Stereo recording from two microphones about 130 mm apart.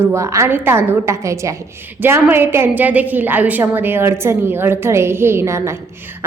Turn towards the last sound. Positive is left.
turn(degrees=-20)  # may be behind; listen again after turning